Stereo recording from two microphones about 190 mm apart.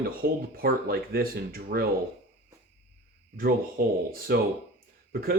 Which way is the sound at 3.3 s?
50° right (ahead or behind).